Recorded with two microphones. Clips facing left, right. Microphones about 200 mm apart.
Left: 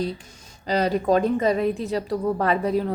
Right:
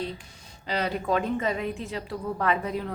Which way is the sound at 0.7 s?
40° left (ahead or behind).